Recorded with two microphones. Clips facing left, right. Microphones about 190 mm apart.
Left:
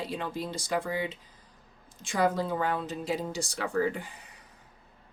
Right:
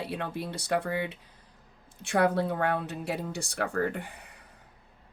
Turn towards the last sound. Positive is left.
turn(degrees=-60)  # may be behind; listen again after turning